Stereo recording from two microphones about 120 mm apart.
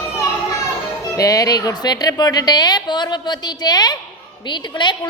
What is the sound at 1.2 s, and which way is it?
A woman's voice, 30° left (ahead or behind).